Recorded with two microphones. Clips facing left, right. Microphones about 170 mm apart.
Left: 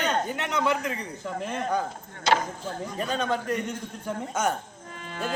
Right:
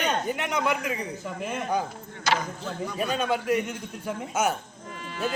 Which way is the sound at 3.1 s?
10° right (ahead or behind).